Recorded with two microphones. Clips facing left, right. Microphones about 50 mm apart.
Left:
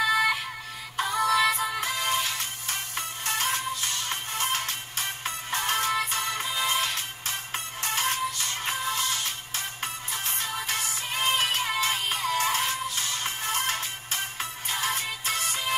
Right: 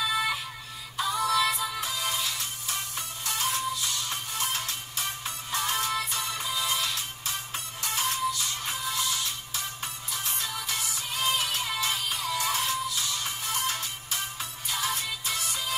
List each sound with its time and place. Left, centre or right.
0.0 s music: left